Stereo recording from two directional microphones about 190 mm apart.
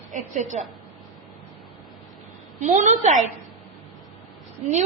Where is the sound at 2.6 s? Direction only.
40° right (ahead or behind).